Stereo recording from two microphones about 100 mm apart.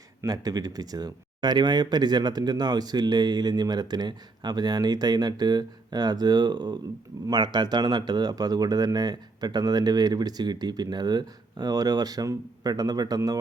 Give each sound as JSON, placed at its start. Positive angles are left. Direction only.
{"t": 0.2, "sound": "speech", "side_deg": -40}